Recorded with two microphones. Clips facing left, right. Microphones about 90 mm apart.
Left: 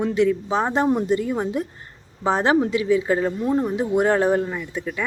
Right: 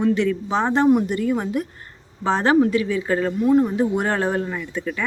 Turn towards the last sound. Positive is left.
turn(degrees=15)  # may be behind; listen again after turning